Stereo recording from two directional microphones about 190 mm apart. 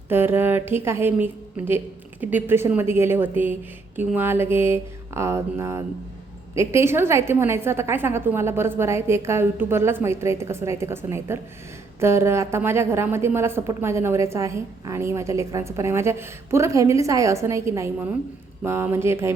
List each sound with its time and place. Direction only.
0.1 s a woman's voice: 10° right (ahead or behind)